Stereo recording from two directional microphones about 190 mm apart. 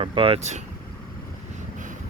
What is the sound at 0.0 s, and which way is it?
Speech, 30° right (ahead or behind).